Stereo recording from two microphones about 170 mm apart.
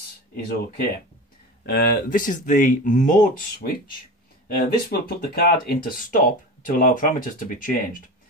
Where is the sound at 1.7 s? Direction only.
65° left (ahead or behind).